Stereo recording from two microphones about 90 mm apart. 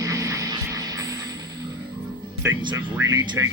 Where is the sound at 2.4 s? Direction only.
25° right (ahead or behind).